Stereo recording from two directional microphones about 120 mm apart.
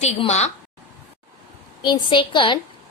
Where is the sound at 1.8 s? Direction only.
40° left (ahead or behind).